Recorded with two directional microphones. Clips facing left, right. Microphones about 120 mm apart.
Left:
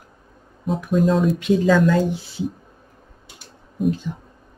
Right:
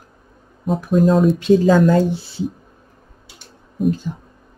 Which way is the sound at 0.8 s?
40° right (ahead or behind).